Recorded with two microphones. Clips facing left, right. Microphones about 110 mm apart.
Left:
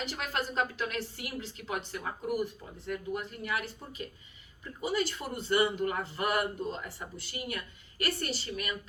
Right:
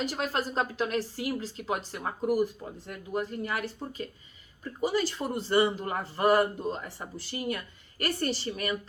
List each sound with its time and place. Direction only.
0.0 s speech: 35° right (ahead or behind)